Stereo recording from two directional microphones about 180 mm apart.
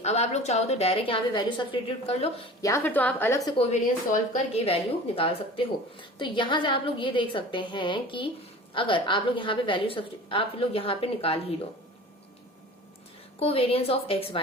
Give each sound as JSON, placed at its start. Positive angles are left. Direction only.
{"t": 0.0, "sound": "a woman's voice", "side_deg": 40}
{"t": 2.6, "sound": "a woman's voice", "side_deg": 15}
{"t": 3.6, "sound": "a woman's voice", "side_deg": 40}
{"t": 13.4, "sound": "a woman's voice", "side_deg": 30}